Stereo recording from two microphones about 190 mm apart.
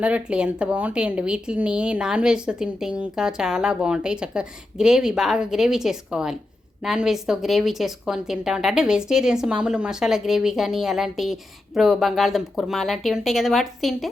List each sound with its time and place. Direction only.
0.0 s speech: 5° right (ahead or behind)